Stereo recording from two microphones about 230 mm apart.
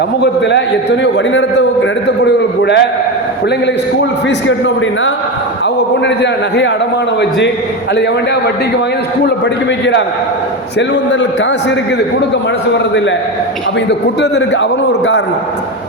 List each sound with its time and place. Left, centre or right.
0.2 s a man's voice: left
4.3 s a man's voice: left
10.8 s a man's voice: left
14.2 s a man's voice: left